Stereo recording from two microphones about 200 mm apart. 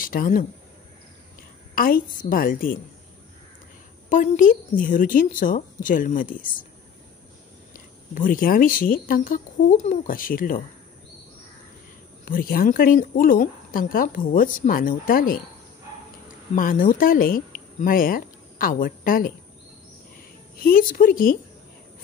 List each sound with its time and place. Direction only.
0.0 s speech: 45° left (ahead or behind)
1.8 s a woman's voice: 45° left (ahead or behind)
4.1 s a woman's voice: 40° left (ahead or behind)
7.7 s a woman's voice: 45° left (ahead or behind)
12.3 s a woman's voice: 45° left (ahead or behind)
16.5 s speech: 45° left (ahead or behind)
20.5 s a woman's voice: 50° left (ahead or behind)